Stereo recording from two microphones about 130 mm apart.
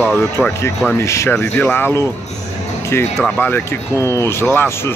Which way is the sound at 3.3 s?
15° left (ahead or behind).